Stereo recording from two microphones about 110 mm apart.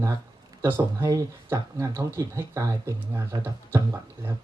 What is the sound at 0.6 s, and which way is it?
Speech, 20° right (ahead or behind).